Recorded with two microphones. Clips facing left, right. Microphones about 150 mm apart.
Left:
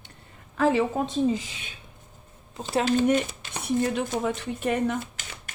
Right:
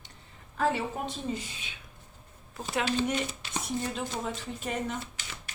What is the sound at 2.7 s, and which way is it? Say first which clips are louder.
Speech: left 7 dB; 40° left (ahead or behind).